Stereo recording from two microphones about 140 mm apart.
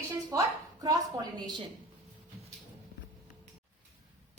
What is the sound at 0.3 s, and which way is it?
A woman's voice, 25° right (ahead or behind).